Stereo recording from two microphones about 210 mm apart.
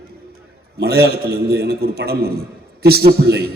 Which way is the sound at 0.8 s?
50° right (ahead or behind).